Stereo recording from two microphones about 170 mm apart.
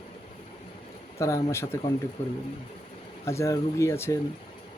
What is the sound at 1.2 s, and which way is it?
Speech, 20° left (ahead or behind).